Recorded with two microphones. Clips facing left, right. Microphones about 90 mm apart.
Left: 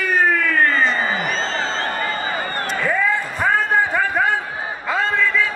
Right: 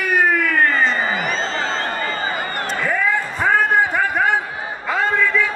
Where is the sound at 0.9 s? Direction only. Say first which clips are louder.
Even; 35° left (ahead or behind).